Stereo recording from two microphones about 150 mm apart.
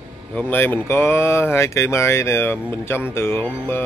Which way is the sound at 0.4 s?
15° left (ahead or behind).